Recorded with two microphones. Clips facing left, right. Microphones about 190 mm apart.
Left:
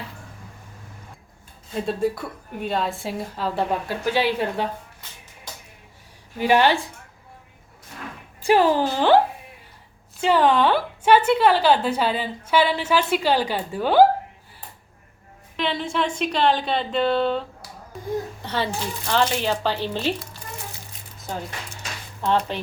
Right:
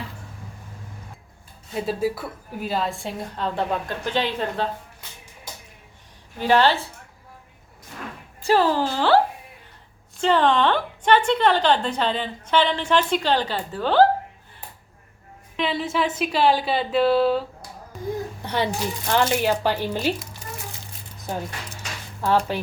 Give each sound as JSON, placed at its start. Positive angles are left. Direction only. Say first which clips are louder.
{"t": 1.7, "sound": "a woman's voice", "louder": "left 1 dB", "side_deg": -5}
{"t": 6.4, "sound": "a woman's voice", "louder": "even", "side_deg": 15}
{"t": 8.4, "sound": "a woman's voice", "louder": "left 2 dB", "side_deg": 15}
{"t": 15.5, "sound": "a woman's voice", "louder": "right 1 dB", "side_deg": 0}
{"t": 18.4, "sound": "speech", "louder": "right 6 dB", "side_deg": -15}
{"t": 22.2, "sound": "speech", "louder": "right 1 dB", "side_deg": -10}